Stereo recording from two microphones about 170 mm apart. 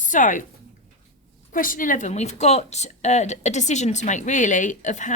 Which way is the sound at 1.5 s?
55° left (ahead or behind).